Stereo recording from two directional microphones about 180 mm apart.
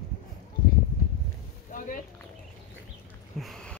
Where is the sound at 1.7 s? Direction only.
45° left (ahead or behind).